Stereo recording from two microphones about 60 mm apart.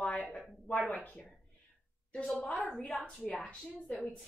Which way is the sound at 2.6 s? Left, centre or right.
Centre.